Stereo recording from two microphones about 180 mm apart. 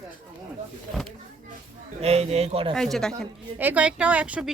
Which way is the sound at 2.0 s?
35° right (ahead or behind).